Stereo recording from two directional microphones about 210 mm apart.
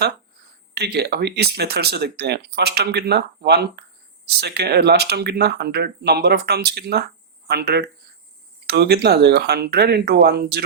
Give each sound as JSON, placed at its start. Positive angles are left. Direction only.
{"t": 0.7, "sound": "speech", "side_deg": -50}